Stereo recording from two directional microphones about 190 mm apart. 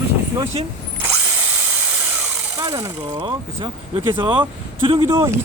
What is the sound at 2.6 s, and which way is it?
Speech, 20° right (ahead or behind).